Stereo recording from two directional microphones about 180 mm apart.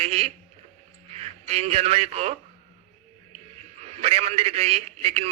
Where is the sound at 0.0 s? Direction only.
35° right (ahead or behind).